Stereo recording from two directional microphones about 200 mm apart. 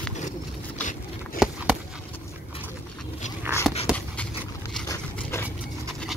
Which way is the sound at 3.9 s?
5° right (ahead or behind).